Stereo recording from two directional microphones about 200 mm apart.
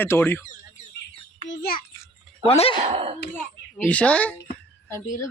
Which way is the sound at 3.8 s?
5° left (ahead or behind).